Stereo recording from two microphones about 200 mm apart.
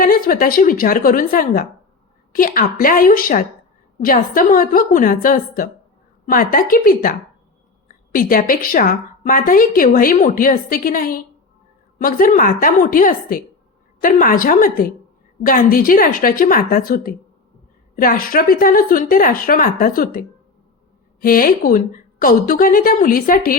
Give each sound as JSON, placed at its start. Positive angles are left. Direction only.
{"t": 0.0, "sound": "a woman's voice", "side_deg": 45}